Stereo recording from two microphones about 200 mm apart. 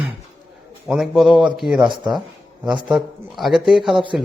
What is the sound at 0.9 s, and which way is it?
A man's voice, centre (ahead or behind).